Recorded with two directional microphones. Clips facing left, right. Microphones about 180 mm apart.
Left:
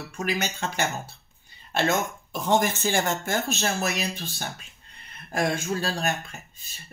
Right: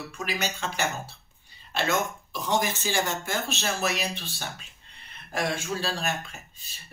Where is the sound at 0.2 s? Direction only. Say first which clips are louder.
Left 3 dB; 45° left (ahead or behind).